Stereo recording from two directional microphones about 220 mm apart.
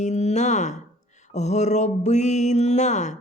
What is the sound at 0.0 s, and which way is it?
Speech, 30° left (ahead or behind).